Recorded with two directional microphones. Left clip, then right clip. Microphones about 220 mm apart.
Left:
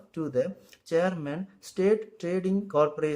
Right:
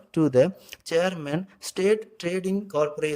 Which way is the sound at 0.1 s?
40° right (ahead or behind).